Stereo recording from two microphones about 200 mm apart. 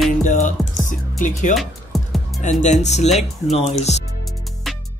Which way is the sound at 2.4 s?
35° left (ahead or behind).